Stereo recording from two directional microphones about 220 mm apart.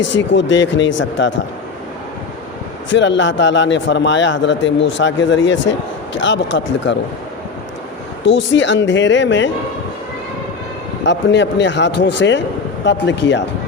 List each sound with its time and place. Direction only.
0.1 s a man's voice: 55° left (ahead or behind)
2.9 s a man's voice: 55° left (ahead or behind)
8.2 s a man's voice: 55° left (ahead or behind)
11.0 s a man's voice: 55° left (ahead or behind)